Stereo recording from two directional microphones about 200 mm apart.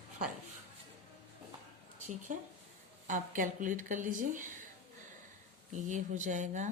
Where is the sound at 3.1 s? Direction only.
40° right (ahead or behind).